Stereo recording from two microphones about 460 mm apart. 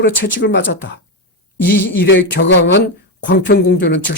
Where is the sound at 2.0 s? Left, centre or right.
Left.